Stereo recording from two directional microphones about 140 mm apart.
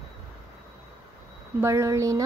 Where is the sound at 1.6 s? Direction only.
20° right (ahead or behind).